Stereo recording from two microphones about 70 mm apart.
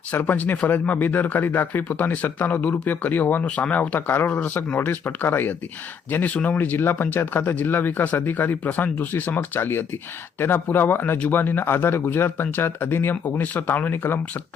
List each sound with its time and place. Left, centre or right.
0.1 s speech: left